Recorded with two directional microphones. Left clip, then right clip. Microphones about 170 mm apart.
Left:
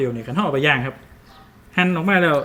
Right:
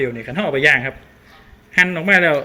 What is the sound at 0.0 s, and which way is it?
Speech, 50° left (ahead or behind).